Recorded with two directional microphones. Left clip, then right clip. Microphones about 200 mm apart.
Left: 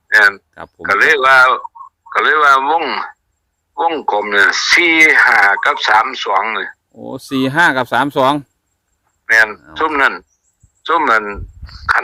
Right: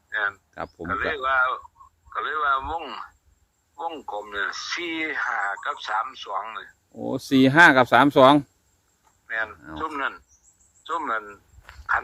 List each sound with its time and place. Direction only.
0.1 s a sound: 55° left (ahead or behind)
0.8 s speech: 50° left (ahead or behind)
6.9 s speech: 30° left (ahead or behind)
9.2 s a man's voice: 50° left (ahead or behind)